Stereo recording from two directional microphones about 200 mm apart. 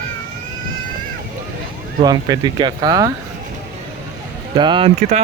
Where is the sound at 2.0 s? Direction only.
20° right (ahead or behind).